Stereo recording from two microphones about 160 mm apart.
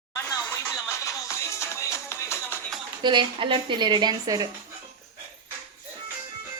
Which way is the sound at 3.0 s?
30° right (ahead or behind).